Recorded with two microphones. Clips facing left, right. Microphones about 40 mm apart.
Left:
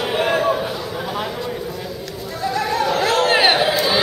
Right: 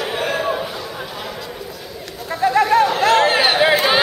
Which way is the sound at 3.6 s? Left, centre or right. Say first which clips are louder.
Right 3 dB; right.